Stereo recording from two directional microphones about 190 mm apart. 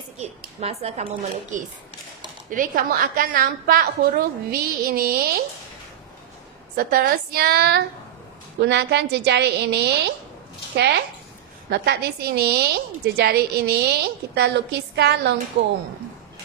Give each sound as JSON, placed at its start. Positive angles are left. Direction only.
{"t": 0.2, "sound": "speech", "side_deg": -35}
{"t": 2.5, "sound": "a woman's voice", "side_deg": -45}
{"t": 6.8, "sound": "a woman's voice", "side_deg": -50}